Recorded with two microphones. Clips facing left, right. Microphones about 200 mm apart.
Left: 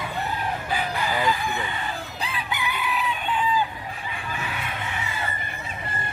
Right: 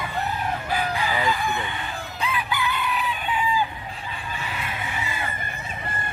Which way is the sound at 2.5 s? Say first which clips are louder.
Right 2 dB; 15° left (ahead or behind).